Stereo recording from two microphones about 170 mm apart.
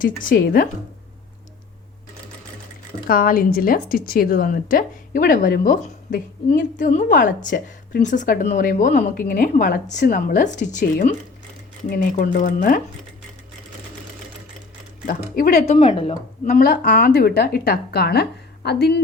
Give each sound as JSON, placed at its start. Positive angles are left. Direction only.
{"t": 0.0, "sound": "a woman's voice", "side_deg": 55}
{"t": 3.1, "sound": "a woman's voice", "side_deg": 55}
{"t": 6.1, "sound": "a woman's voice", "side_deg": 75}
{"t": 12.1, "sound": "a woman's voice", "side_deg": 50}
{"t": 15.0, "sound": "a woman's voice", "side_deg": 60}
{"t": 15.6, "sound": "a woman's voice", "side_deg": 40}
{"t": 16.6, "sound": "speech", "side_deg": 60}